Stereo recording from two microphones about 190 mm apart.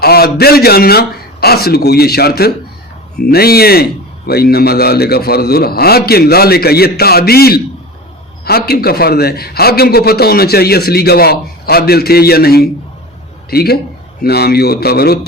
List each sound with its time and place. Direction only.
0.0 s a man's voice: 55° left (ahead or behind)